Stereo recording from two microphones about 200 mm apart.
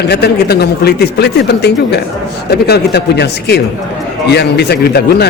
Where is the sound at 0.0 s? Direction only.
55° left (ahead or behind).